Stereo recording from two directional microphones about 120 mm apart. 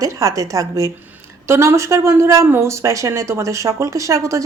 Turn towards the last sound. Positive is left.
turn(degrees=-25)  # may be behind; listen again after turning